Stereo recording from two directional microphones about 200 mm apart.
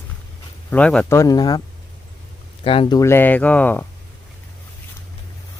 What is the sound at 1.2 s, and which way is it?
Speech, 20° left (ahead or behind).